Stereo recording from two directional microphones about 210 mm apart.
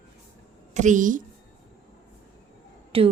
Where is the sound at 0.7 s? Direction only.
35° right (ahead or behind).